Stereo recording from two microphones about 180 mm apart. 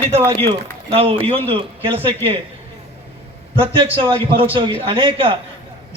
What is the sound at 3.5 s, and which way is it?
A man's voice, 30° right (ahead or behind).